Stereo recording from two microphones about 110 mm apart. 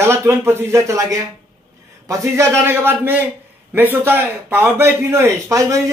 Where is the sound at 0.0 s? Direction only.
25° right (ahead or behind).